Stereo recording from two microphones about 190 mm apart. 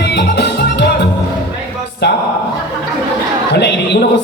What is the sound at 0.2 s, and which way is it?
Music, 65° left (ahead or behind).